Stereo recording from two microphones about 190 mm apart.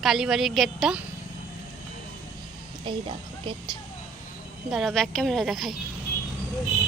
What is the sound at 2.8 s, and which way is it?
Speech, 25° right (ahead or behind).